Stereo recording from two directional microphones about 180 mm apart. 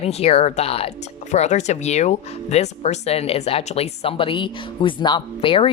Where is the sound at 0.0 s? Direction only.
35° left (ahead or behind).